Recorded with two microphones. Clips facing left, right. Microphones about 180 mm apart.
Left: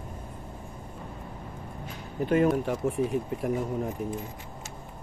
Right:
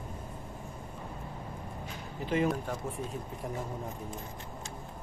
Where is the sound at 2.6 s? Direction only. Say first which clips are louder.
Left 9 dB; 80° left.